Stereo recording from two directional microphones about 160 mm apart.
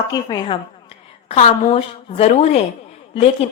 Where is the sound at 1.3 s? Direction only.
40° left (ahead or behind).